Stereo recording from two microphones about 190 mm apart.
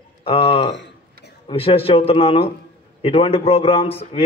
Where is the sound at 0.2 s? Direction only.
30° left (ahead or behind).